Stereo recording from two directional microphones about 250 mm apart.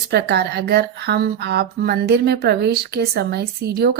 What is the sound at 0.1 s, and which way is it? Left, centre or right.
Speech, right.